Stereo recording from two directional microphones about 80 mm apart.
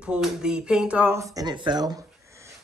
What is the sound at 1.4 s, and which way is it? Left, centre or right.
Speech, right.